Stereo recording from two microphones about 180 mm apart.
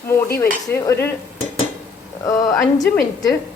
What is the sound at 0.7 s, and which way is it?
Speech, 10° left (ahead or behind).